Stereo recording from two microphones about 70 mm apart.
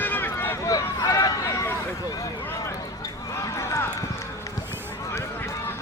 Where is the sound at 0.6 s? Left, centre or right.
Left.